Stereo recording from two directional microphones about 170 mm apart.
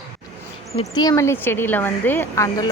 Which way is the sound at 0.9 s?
20° left (ahead or behind).